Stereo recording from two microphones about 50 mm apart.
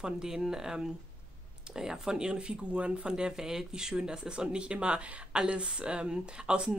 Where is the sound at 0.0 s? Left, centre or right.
Centre.